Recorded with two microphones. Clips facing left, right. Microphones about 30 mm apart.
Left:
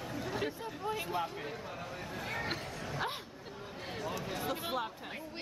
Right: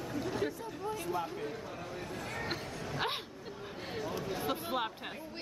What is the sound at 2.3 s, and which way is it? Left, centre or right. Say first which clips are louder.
Speech: left 2 dB; centre.